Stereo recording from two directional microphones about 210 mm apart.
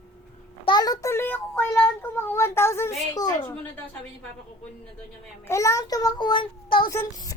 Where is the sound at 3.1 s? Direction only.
20° left (ahead or behind).